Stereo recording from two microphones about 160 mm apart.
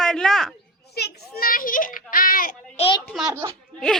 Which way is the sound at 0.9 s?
90° left.